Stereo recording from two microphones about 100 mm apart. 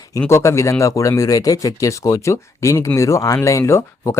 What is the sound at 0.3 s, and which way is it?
Speech, 30° left (ahead or behind).